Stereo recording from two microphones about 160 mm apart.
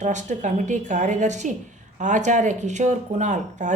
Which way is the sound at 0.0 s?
50° right (ahead or behind).